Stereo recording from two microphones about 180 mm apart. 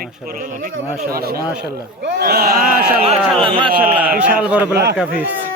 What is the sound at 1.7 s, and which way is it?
A man's voice, 70° right (ahead or behind).